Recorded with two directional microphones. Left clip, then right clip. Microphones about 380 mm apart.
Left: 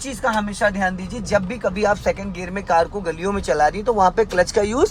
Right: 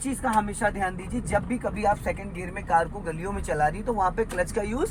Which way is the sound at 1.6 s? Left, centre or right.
Left.